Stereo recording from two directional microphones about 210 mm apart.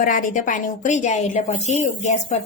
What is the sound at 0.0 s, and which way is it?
A woman's voice, 40° left (ahead or behind).